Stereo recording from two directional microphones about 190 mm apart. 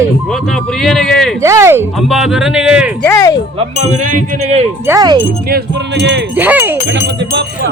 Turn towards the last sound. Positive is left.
turn(degrees=-10)  # may be behind; listen again after turning